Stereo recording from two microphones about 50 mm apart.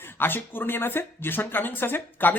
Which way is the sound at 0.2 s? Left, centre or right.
Left.